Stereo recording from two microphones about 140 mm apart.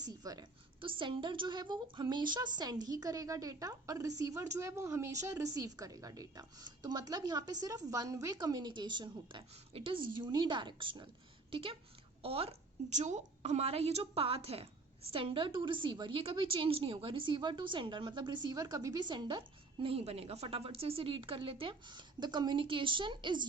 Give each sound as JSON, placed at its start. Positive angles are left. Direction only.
{"t": 0.1, "sound": "a woman's voice", "side_deg": -25}